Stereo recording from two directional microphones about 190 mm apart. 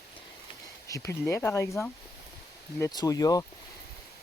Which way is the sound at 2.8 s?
20° left (ahead or behind).